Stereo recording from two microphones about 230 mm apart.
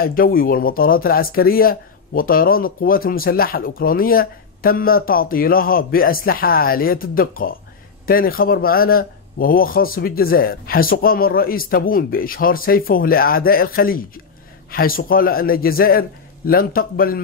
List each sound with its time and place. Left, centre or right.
0.0 s speech: left